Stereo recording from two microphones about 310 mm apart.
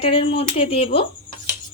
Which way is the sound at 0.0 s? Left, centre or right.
Centre.